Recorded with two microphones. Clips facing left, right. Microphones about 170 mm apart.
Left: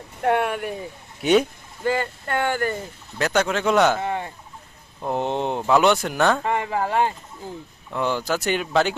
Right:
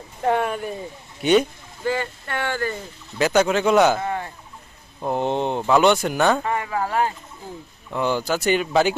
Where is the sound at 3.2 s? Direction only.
5° right (ahead or behind).